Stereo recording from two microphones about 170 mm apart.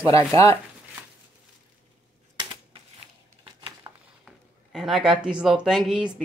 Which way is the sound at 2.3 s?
30° right (ahead or behind).